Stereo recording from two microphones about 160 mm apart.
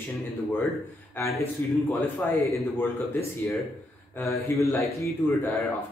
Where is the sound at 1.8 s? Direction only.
10° left (ahead or behind).